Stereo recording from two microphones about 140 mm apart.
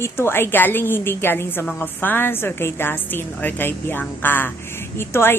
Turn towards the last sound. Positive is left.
turn(degrees=15)  # may be behind; listen again after turning